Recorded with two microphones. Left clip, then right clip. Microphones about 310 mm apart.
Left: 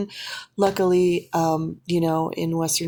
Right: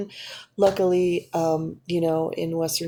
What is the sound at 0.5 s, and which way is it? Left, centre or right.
Speech, left.